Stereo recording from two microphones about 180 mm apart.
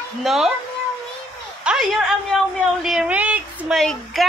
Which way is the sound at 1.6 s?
5° right (ahead or behind).